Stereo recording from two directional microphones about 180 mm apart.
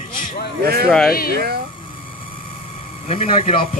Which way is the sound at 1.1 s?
55° left (ahead or behind).